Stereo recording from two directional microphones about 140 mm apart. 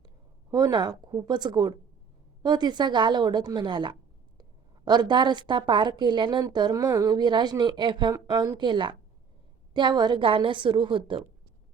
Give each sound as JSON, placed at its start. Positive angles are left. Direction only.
{"t": 0.5, "sound": "a woman's voice", "side_deg": -30}